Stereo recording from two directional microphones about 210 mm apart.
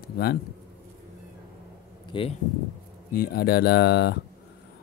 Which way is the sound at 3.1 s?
50° left (ahead or behind).